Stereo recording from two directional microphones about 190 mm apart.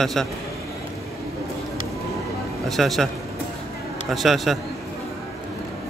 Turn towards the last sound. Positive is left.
turn(degrees=0)  # may be behind; listen again after turning